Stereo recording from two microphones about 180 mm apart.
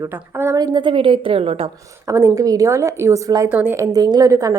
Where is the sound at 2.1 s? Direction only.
15° right (ahead or behind).